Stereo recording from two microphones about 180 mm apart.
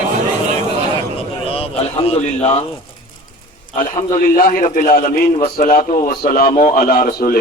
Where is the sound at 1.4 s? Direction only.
30° left (ahead or behind).